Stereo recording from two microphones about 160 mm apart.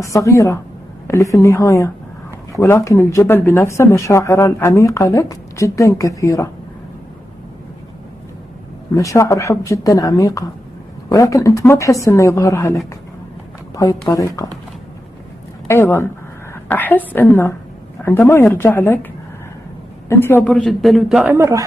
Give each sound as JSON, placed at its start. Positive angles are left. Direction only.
{"t": 0.0, "sound": "speech", "side_deg": 20}
{"t": 8.9, "sound": "speech", "side_deg": 20}
{"t": 13.7, "sound": "speech", "side_deg": 20}
{"t": 15.7, "sound": "a woman's voice", "side_deg": 15}
{"t": 20.1, "sound": "a man's voice", "side_deg": 15}
{"t": 21.4, "sound": "a man's voice", "side_deg": -20}